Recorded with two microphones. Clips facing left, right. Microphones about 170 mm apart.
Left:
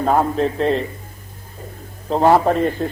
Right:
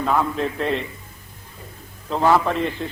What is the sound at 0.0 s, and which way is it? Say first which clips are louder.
Speech: left 4 dB; 40° left (ahead or behind).